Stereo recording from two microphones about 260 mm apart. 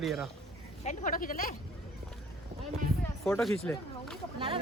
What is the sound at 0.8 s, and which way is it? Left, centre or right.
Speech, left.